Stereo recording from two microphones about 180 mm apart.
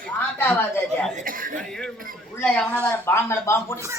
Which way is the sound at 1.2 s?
50° right (ahead or behind).